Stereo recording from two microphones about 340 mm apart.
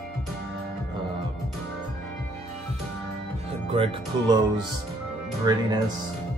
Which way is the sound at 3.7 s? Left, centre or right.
Centre.